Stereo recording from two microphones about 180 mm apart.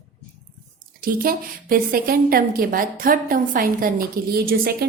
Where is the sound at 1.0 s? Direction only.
55° right (ahead or behind).